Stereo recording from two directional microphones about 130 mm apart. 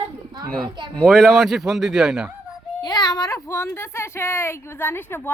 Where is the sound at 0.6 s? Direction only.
35° right (ahead or behind).